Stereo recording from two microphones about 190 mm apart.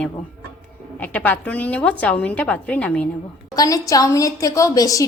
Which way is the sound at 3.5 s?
20° left (ahead or behind).